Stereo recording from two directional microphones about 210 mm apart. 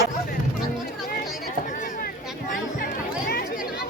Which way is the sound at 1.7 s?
40° left (ahead or behind).